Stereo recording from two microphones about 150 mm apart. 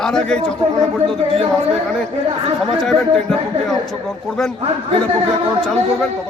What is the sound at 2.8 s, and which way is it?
Speech, centre (ahead or behind).